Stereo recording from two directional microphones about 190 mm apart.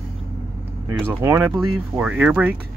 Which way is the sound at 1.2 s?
10° right (ahead or behind).